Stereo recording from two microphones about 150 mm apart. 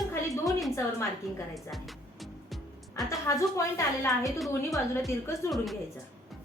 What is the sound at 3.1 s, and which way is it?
A woman's voice, 20° left (ahead or behind).